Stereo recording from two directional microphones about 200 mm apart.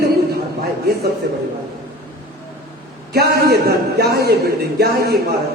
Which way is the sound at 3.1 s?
50° right (ahead or behind).